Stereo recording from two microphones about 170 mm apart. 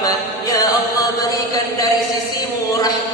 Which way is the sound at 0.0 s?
20° left (ahead or behind).